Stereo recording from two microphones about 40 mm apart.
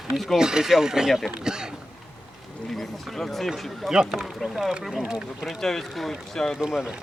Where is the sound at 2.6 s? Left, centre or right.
Centre.